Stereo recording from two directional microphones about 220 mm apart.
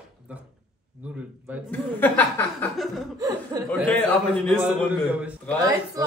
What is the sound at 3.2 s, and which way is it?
Speech, 15° right (ahead or behind).